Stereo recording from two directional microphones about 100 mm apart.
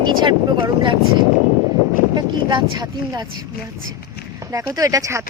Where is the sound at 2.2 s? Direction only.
45° right (ahead or behind).